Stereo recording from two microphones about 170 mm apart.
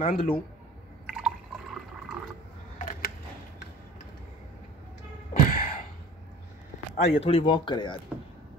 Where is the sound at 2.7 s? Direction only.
55° left (ahead or behind).